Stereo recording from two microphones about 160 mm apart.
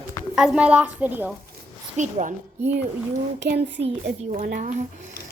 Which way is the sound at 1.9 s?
50° right (ahead or behind).